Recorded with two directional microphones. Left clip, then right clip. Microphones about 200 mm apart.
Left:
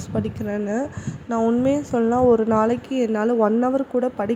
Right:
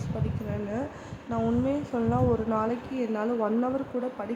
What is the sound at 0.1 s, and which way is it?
A woman's voice, 35° left (ahead or behind).